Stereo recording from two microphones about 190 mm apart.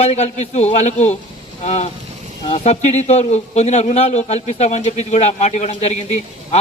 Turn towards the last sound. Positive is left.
turn(degrees=35)  # may be behind; listen again after turning